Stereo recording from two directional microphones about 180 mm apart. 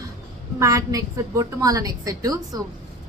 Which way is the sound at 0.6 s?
20° right (ahead or behind).